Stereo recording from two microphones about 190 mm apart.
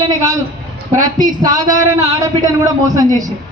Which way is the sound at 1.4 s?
20° right (ahead or behind).